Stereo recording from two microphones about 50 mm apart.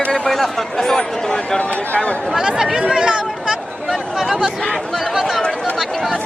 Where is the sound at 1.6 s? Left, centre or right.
Left.